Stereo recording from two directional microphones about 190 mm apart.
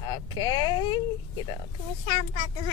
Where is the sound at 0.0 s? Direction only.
20° left (ahead or behind).